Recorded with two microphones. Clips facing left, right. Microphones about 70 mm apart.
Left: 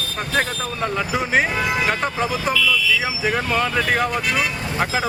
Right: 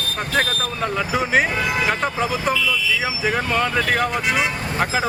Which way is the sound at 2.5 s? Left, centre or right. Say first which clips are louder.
Left 3 dB; centre.